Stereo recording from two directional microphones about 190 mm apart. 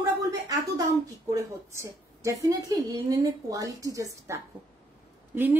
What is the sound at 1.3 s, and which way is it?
A woman's voice, 15° right (ahead or behind).